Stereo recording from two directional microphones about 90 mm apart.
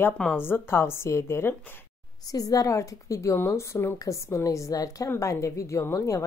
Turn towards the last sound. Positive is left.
turn(degrees=30)  # may be behind; listen again after turning